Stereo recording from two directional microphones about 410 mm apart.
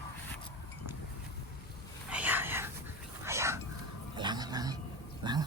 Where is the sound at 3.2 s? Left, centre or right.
Centre.